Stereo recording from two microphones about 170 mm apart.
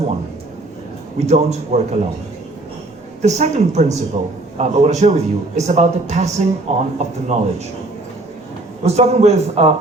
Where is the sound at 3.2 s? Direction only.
40° right (ahead or behind).